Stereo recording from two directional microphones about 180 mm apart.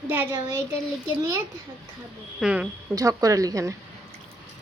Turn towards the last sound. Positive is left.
turn(degrees=-20)  # may be behind; listen again after turning